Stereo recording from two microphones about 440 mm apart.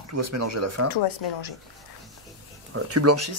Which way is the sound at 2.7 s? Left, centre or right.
Right.